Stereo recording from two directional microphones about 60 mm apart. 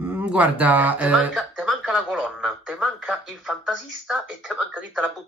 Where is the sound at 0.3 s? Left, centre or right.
Right.